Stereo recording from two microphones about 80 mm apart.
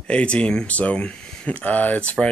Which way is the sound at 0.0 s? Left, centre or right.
Centre.